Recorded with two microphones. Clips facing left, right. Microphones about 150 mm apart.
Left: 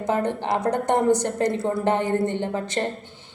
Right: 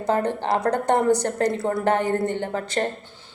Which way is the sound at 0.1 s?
20° left (ahead or behind).